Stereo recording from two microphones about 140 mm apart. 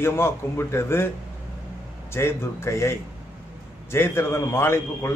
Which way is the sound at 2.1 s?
15° left (ahead or behind).